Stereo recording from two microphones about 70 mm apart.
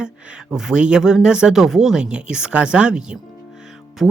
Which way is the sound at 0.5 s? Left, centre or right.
Centre.